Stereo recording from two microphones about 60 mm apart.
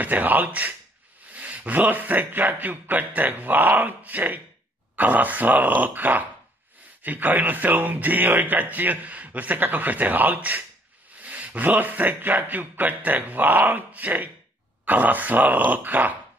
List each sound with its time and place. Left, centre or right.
0.0 s speech: right